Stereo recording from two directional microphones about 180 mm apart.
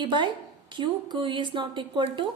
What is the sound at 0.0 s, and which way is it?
A woman's voice, 25° right (ahead or behind).